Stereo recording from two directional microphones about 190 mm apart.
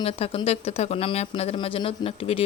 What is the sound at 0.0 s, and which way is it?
Speech, 30° left (ahead or behind).